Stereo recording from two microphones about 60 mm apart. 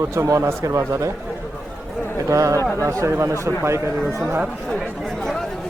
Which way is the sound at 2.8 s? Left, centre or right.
Right.